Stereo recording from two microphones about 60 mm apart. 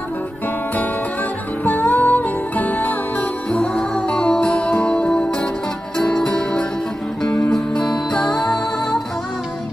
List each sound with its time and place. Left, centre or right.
1.6 s music: left
3.5 s music: centre
7.7 s music: centre